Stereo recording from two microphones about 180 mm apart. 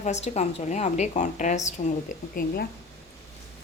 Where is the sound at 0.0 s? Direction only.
40° left (ahead or behind).